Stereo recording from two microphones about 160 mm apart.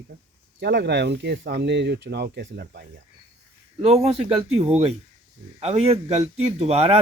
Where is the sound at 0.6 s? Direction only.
90° right.